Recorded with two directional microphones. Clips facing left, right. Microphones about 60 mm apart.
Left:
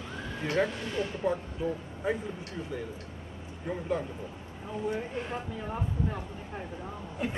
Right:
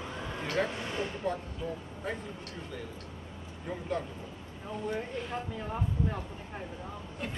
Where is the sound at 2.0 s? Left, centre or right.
Centre.